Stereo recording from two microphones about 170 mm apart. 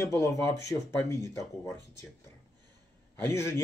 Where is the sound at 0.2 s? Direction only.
15° left (ahead or behind).